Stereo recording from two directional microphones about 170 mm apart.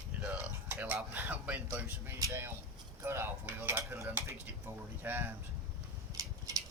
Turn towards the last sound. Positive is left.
turn(degrees=-20)  # may be behind; listen again after turning